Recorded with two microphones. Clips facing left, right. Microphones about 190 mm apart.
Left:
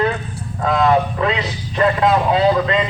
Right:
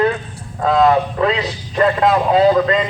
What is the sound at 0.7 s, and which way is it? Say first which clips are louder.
Speech: right 2 dB; 35° right (ahead or behind).